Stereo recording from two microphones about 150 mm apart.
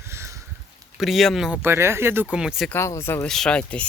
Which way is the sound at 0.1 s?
20° right (ahead or behind).